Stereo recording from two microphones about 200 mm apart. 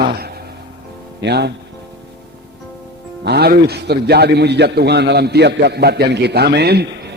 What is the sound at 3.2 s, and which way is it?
A man's voice, 55° right (ahead or behind).